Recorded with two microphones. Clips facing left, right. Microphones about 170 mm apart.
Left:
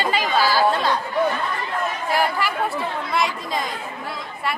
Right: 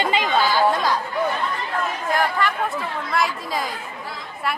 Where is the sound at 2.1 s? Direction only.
10° left (ahead or behind).